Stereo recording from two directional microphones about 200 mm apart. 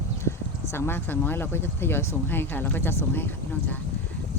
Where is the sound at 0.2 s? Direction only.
15° left (ahead or behind).